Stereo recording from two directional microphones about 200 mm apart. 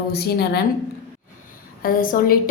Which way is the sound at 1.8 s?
45° left (ahead or behind).